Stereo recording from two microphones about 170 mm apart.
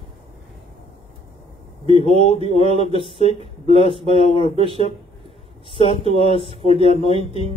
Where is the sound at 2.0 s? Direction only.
40° left (ahead or behind).